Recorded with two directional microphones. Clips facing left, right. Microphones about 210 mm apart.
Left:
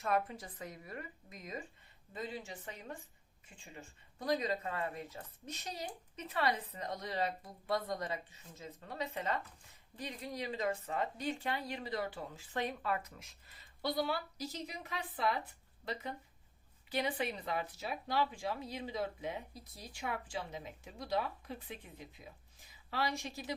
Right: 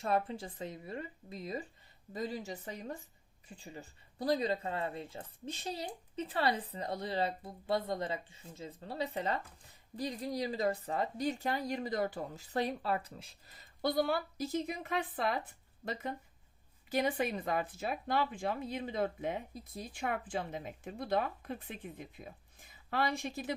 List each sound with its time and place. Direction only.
0.0 s a woman's voice: 30° right (ahead or behind); by 23.6 s 55° right (ahead or behind)